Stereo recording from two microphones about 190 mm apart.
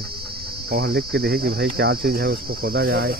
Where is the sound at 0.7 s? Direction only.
55° right (ahead or behind).